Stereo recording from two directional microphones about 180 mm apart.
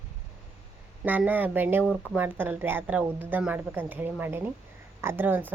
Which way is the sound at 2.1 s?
10° right (ahead or behind).